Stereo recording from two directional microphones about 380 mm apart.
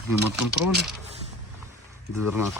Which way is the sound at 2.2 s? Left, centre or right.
Left.